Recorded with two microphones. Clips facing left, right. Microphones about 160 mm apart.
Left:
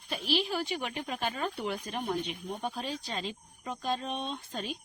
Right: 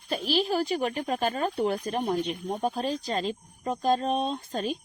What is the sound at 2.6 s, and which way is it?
Speech, 40° right (ahead or behind).